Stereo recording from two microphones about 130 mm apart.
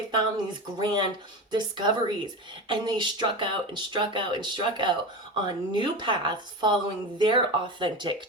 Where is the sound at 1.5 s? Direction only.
35° right (ahead or behind).